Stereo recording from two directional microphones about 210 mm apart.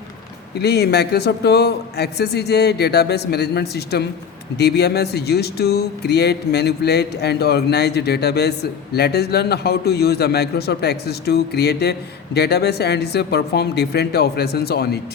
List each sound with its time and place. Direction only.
0.6 s a man's voice: 50° left (ahead or behind)